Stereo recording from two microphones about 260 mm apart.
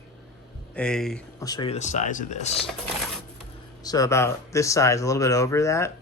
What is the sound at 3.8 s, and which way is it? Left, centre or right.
Speech, centre.